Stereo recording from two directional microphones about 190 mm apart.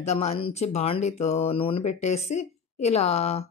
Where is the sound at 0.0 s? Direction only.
35° left (ahead or behind).